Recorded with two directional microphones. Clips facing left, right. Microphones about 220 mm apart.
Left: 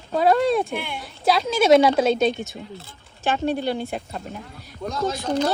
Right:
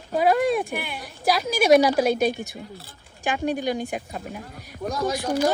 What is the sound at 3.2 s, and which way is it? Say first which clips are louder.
A woman's voice: left 2 dB; 15° right (ahead or behind).